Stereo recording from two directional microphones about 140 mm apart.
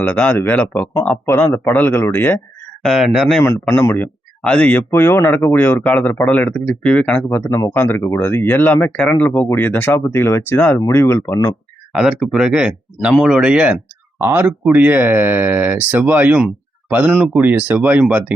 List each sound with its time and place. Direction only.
0.0 s speech: 10° left (ahead or behind)
2.8 s speech: centre (ahead or behind)
3.7 s speech: 10° left (ahead or behind)
11.9 s speech: centre (ahead or behind)